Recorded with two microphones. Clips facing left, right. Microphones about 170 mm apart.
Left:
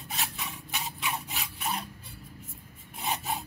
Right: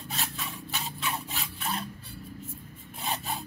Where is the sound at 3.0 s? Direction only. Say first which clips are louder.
Left 1 dB; 20° left (ahead or behind).